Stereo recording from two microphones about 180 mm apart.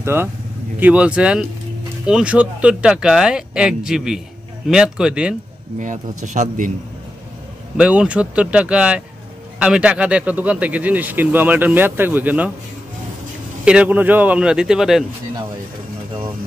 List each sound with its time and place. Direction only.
0.0 s speech: 15° right (ahead or behind)
6.2 s a man's voice: 40° right (ahead or behind)
7.7 s speech: 5° right (ahead or behind)
13.7 s speech: 10° right (ahead or behind)